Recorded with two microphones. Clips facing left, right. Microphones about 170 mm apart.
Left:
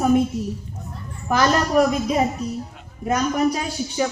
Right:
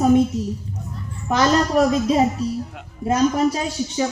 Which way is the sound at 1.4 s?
25° right (ahead or behind).